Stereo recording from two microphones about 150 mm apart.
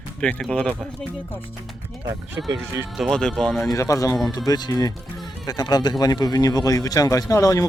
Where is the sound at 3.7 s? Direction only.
20° left (ahead or behind).